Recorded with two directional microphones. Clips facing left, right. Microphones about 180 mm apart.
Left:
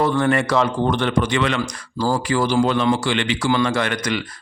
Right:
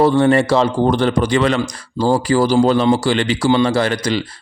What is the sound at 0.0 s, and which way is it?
Speech, 30° right (ahead or behind).